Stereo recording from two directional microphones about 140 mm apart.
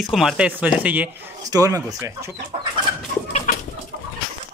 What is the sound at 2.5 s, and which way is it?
Chicken, 50° right (ahead or behind).